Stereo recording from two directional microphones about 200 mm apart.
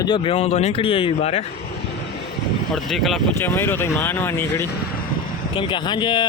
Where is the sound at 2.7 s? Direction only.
Centre (ahead or behind).